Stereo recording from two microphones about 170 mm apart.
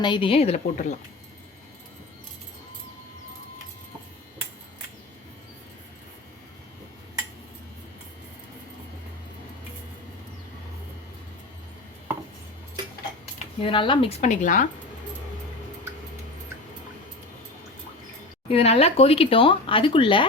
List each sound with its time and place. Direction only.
0.0 s speech: 30° left (ahead or behind)
13.6 s speech: 30° left (ahead or behind); by 14.7 s 50° left (ahead or behind)
18.4 s speech: 35° left (ahead or behind)